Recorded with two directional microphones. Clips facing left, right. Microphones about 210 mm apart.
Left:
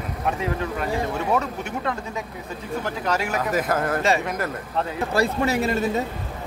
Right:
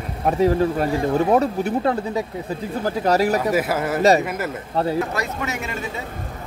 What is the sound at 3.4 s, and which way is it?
Speech, 10° right (ahead or behind).